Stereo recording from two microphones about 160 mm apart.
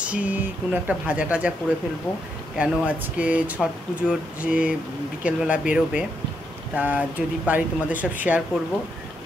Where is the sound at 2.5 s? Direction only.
10° right (ahead or behind).